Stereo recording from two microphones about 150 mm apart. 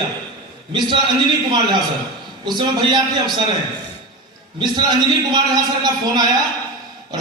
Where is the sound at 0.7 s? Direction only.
30° right (ahead or behind).